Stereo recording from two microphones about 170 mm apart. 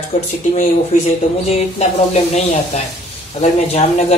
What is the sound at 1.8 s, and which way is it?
Speech, 40° left (ahead or behind).